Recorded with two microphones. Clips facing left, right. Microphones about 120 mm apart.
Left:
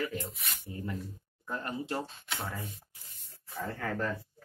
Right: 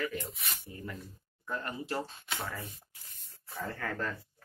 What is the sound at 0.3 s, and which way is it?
Speech, centre (ahead or behind).